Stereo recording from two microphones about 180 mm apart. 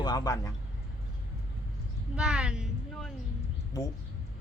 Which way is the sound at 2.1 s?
5° right (ahead or behind).